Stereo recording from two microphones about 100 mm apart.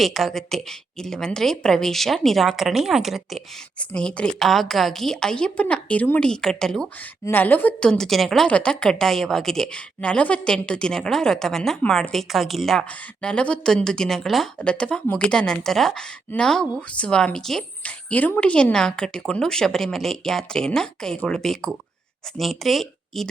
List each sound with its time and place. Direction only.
0.0 s speech: centre (ahead or behind)
3.8 s a woman's voice: 10° left (ahead or behind)
7.3 s a woman's voice: 20° left (ahead or behind)
7.9 s a woman's voice: 5° left (ahead or behind)
18.1 s a woman's voice: 15° left (ahead or behind)